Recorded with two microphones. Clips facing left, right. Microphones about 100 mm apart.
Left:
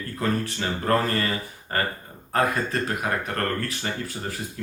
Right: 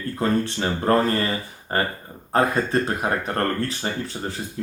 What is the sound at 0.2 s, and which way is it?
Speech, 30° right (ahead or behind).